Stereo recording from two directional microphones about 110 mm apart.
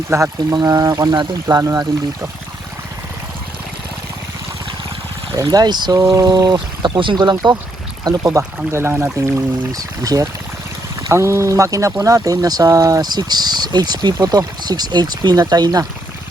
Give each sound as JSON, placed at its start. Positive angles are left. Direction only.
{"t": 0.3, "sound": "speech", "side_deg": -35}
{"t": 5.3, "sound": "speech", "side_deg": -35}